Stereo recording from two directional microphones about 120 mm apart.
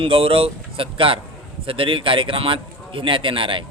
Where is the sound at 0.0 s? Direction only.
50° right (ahead or behind).